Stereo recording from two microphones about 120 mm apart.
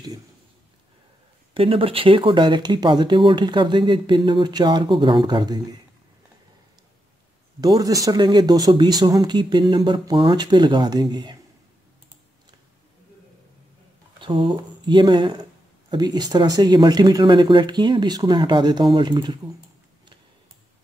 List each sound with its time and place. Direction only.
1.5 s speech: 50° right (ahead or behind)
7.6 s speech: 30° right (ahead or behind)
14.2 s speech: 45° right (ahead or behind)